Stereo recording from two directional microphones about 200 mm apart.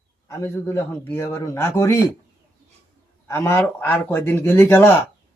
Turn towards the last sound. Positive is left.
turn(degrees=10)  # may be behind; listen again after turning